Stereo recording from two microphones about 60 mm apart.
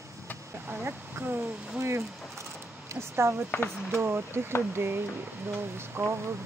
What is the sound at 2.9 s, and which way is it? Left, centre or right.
Speech, right.